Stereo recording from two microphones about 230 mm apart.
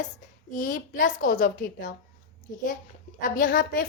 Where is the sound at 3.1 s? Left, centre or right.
Left.